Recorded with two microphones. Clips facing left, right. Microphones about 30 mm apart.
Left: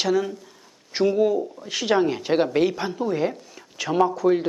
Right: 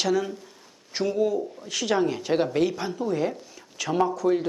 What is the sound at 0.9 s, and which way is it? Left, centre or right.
Speech, centre.